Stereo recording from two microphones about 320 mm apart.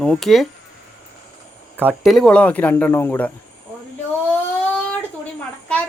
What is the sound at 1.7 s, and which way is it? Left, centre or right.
Speech, centre.